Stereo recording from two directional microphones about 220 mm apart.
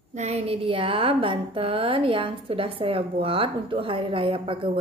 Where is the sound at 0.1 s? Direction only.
30° right (ahead or behind).